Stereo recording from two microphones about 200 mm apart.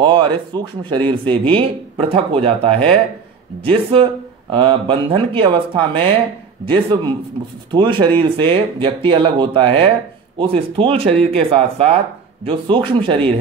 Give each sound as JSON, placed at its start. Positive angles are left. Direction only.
{"t": 0.0, "sound": "speech", "side_deg": -20}
{"t": 7.7, "sound": "speech", "side_deg": -25}